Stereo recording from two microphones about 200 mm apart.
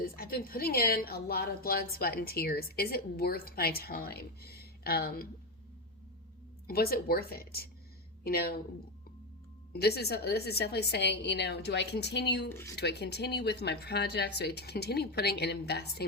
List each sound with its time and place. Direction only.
0.0 s a woman's voice: 50° left (ahead or behind)
6.7 s a woman's voice: 50° left (ahead or behind)
9.7 s speech: 55° left (ahead or behind)
12.5 s speech: 10° left (ahead or behind)
12.7 s speech: 55° left (ahead or behind)